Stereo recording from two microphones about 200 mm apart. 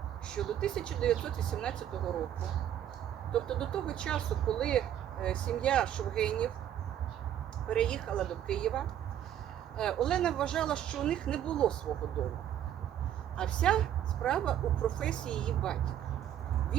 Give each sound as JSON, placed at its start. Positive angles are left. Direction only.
{"t": 0.3, "sound": "speech", "side_deg": 5}
{"t": 3.3, "sound": "speech", "side_deg": 5}
{"t": 7.7, "sound": "speech", "side_deg": 5}